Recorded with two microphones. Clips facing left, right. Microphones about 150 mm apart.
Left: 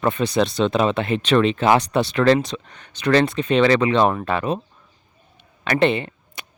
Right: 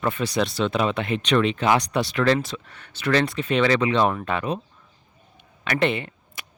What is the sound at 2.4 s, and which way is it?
Speech, 20° left (ahead or behind).